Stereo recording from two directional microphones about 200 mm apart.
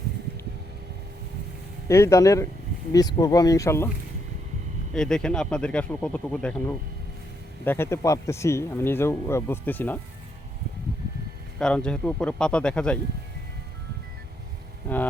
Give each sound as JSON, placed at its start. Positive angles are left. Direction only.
{"t": 1.9, "sound": "speech", "side_deg": 15}
{"t": 4.9, "sound": "speech", "side_deg": 5}
{"t": 11.6, "sound": "speech", "side_deg": 5}